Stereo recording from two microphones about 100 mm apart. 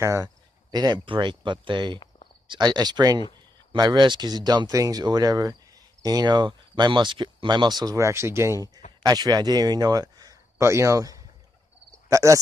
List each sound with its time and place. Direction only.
0.0 s speech: 30° right (ahead or behind)
0.7 s speech: 45° right (ahead or behind)
10.6 s speech: 30° right (ahead or behind)